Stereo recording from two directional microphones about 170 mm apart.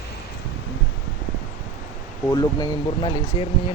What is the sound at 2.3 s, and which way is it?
Speech, 25° left (ahead or behind).